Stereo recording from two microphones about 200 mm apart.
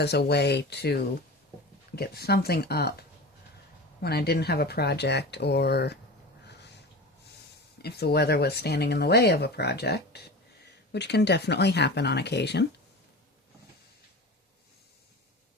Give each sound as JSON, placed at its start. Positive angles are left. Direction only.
{"t": 0.0, "sound": "speech", "side_deg": 55}
{"t": 2.0, "sound": "speech", "side_deg": 50}
{"t": 4.0, "sound": "speech", "side_deg": 50}
{"t": 7.8, "sound": "speech", "side_deg": 55}